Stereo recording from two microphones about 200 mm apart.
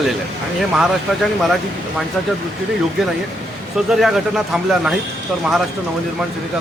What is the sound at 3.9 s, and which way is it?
Speech, centre (ahead or behind).